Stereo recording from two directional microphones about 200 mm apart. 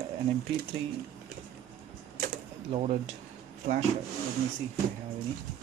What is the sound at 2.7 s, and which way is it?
Speech, 30° right (ahead or behind).